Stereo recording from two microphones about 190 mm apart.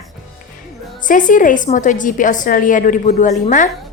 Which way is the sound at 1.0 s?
45° left (ahead or behind).